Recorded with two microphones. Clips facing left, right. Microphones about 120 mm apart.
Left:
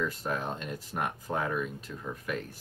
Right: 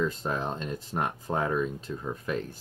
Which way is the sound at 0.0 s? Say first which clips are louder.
Right 3 dB; 25° right (ahead or behind).